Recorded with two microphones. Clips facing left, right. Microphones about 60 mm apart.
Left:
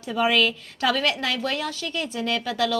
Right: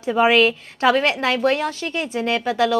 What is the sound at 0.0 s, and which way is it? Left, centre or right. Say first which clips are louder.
A woman's voice: right 6 dB; right.